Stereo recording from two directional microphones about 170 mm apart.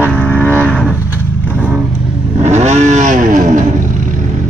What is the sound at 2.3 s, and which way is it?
Vehicle, 40° right (ahead or behind).